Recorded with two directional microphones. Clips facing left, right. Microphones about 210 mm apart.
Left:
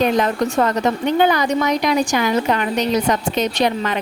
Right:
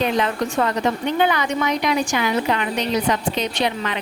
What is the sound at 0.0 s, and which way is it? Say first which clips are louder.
A woman's voice: left 4 dB; 40° left (ahead or behind).